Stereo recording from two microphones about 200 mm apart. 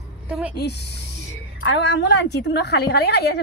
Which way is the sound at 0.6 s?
55° left (ahead or behind).